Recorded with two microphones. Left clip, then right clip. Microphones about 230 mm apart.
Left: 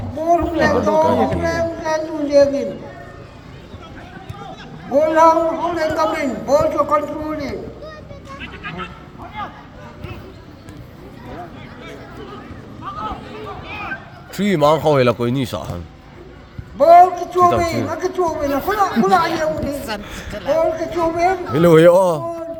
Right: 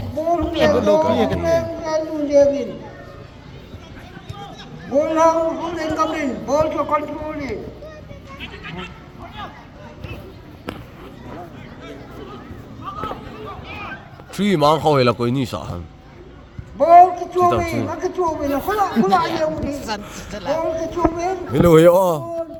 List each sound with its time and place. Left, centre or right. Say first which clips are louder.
0.5 s speech: even; right
1.4 s music: right 1 dB; left
4.9 s a man's voice: left 3 dB; left
8.4 s a sound: left 3 dB; centre
14.3 s a man's voice: left 1 dB; centre
16.7 s a sound: left 1 dB; left
17.6 s a man's voice: left 3 dB; left
20.0 s speech: left 2 dB; centre
20.3 s speech: left 3 dB; right
20.6 s a man's voice: left 2 dB; left
21.5 s speech: left 1 dB; centre